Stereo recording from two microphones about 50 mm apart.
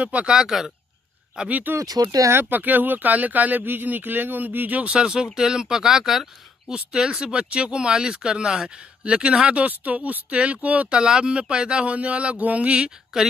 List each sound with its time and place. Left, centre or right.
0.0 s speech: right
0.3 s speech: centre
1.5 s speech: right
4.9 s speech: centre